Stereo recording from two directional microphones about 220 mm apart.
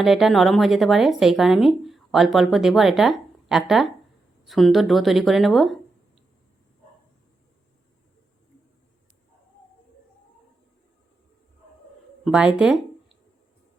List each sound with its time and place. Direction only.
0.0 s speech: centre (ahead or behind)
12.2 s speech: 5° right (ahead or behind)